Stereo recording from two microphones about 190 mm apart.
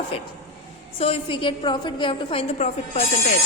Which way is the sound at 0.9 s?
30° left (ahead or behind).